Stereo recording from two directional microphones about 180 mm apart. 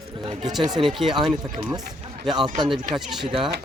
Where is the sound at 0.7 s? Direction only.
Centre (ahead or behind).